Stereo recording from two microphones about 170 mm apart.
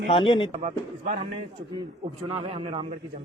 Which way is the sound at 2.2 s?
35° right (ahead or behind).